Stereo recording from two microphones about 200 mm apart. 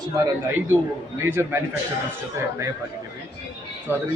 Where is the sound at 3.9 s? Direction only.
10° right (ahead or behind).